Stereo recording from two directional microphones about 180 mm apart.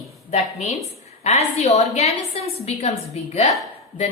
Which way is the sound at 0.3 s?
35° left (ahead or behind).